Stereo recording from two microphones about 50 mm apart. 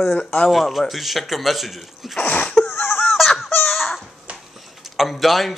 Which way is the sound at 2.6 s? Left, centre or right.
Left.